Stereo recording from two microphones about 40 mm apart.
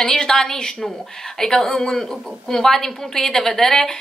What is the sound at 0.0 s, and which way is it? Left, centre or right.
A woman's voice, centre.